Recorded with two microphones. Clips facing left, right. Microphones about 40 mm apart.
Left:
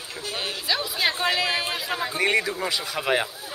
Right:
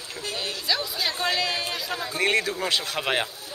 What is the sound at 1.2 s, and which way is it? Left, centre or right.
Speech, centre.